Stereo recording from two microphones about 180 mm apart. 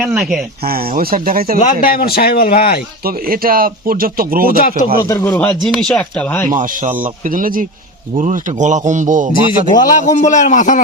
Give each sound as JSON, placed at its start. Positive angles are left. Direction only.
{"t": 0.0, "sound": "speech", "side_deg": -5}
{"t": 0.6, "sound": "speech", "side_deg": -55}
{"t": 1.5, "sound": "speech", "side_deg": 50}
{"t": 3.0, "sound": "speech", "side_deg": -55}
{"t": 5.0, "sound": "speech", "side_deg": 15}
{"t": 5.6, "sound": "speech", "side_deg": 0}
{"t": 6.5, "sound": "speech", "side_deg": -50}
{"t": 9.5, "sound": "a man's voice", "side_deg": 25}
{"t": 10.2, "sound": "a man's voice", "side_deg": 40}